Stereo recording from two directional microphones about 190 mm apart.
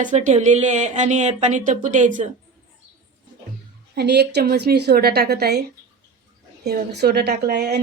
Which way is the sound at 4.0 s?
60° right (ahead or behind).